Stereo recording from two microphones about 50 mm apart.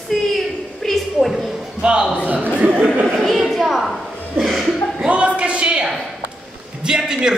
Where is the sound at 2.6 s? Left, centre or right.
Right.